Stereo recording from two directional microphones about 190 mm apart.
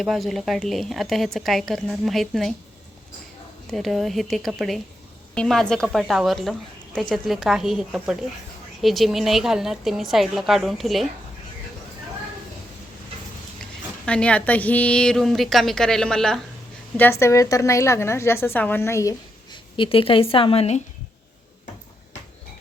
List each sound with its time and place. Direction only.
0.0 s a woman's voice: centre (ahead or behind)
3.7 s a woman's voice: centre (ahead or behind)
14.0 s a woman's voice: 5° left (ahead or behind)
17.0 s a woman's voice: 15° left (ahead or behind); by 20.8 s 35° left (ahead or behind)